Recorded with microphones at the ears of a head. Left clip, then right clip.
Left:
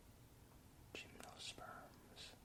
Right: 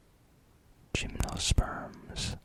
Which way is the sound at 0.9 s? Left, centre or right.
Right.